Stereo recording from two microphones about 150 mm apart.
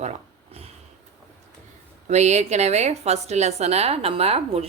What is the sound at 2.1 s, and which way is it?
A woman's voice, 50° right (ahead or behind).